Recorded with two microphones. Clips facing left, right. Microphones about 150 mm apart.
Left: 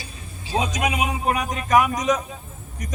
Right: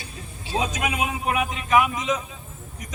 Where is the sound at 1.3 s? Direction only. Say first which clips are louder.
Even; 40° left (ahead or behind).